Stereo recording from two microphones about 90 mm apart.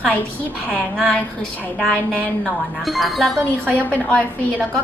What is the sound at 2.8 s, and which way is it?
Speech, centre (ahead or behind).